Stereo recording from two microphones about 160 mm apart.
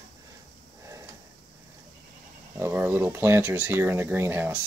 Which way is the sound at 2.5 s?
15° right (ahead or behind).